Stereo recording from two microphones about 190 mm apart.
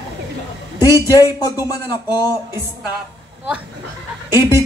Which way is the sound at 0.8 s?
20° left (ahead or behind).